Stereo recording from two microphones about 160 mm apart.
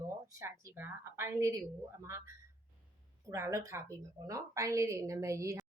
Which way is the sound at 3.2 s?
20° right (ahead or behind).